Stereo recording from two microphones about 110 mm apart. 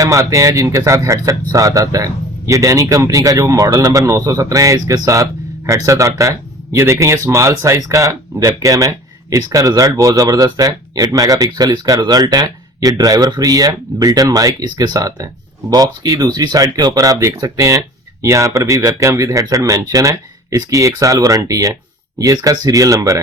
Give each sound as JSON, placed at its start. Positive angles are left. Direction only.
{"t": 0.0, "sound": "speech", "side_deg": -30}